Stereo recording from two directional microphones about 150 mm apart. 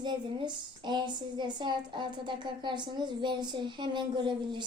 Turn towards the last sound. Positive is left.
turn(degrees=-30)  # may be behind; listen again after turning